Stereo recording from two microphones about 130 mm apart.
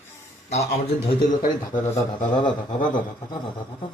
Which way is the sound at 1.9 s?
35° left (ahead or behind).